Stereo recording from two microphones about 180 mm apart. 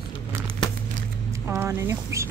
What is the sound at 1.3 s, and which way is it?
Speech, 15° right (ahead or behind).